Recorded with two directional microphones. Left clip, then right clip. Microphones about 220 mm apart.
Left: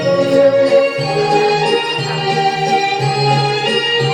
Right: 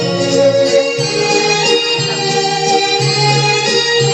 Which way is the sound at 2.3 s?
40° right (ahead or behind).